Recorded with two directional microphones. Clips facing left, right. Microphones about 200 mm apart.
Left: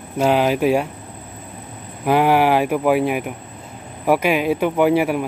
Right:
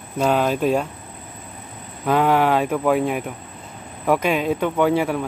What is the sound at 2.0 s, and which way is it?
Speech, 10° left (ahead or behind).